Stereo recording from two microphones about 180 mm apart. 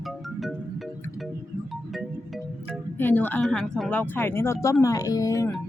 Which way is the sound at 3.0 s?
10° left (ahead or behind).